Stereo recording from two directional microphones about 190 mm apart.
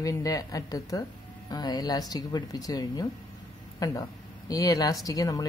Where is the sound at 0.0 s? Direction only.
15° left (ahead or behind).